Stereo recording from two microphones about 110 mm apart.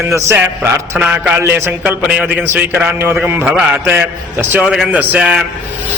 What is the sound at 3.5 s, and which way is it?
Speech, 5° right (ahead or behind).